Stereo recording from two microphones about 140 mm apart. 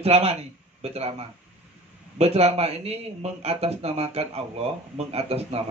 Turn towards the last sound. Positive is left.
turn(degrees=-45)  # may be behind; listen again after turning